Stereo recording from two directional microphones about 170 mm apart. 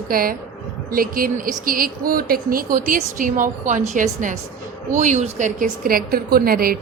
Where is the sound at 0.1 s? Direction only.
60° right (ahead or behind).